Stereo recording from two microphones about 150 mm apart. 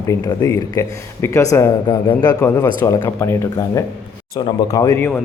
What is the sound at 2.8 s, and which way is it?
Speech, 20° left (ahead or behind).